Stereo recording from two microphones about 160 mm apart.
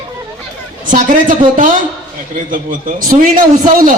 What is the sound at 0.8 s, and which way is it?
A man's voice, 55° right (ahead or behind).